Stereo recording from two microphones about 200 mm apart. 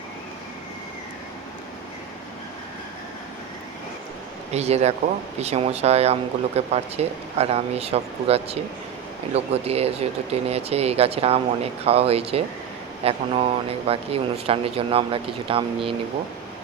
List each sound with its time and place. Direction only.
4.5 s speech: 30° right (ahead or behind)